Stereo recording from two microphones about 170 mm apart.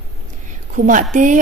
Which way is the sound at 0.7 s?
50° right (ahead or behind).